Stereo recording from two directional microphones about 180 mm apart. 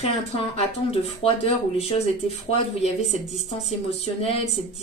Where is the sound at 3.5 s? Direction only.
35° left (ahead or behind).